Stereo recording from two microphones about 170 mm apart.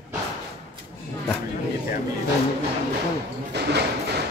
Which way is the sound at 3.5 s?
75° right (ahead or behind).